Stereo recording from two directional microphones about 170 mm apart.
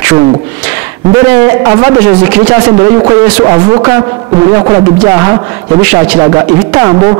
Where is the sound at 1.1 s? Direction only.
15° right (ahead or behind).